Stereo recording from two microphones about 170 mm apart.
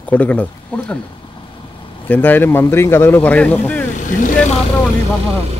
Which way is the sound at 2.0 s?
10° left (ahead or behind).